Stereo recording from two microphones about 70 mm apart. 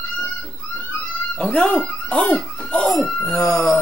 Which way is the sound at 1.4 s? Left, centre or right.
Centre.